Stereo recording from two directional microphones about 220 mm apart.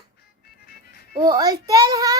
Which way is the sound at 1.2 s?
15° right (ahead or behind).